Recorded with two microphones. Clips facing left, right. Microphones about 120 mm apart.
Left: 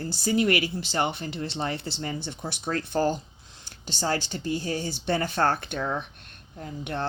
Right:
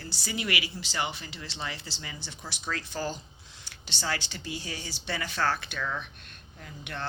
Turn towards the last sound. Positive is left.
turn(degrees=40)  # may be behind; listen again after turning